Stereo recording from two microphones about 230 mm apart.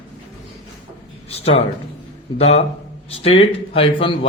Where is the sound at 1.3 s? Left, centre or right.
Left.